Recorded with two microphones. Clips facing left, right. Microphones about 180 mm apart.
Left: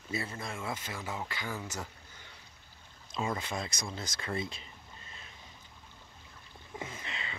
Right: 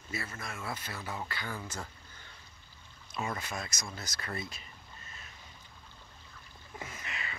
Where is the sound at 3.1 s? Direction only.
25° left (ahead or behind).